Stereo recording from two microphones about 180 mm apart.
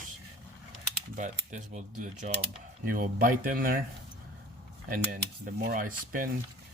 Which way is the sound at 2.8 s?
50° right (ahead or behind).